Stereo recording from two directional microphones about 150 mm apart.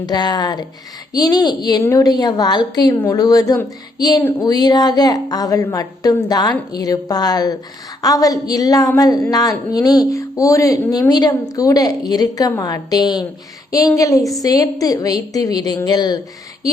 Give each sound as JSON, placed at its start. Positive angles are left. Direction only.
{"t": 0.0, "sound": "speech", "side_deg": 25}
{"t": 4.2, "sound": "speech", "side_deg": 15}
{"t": 4.4, "sound": "speech", "side_deg": 25}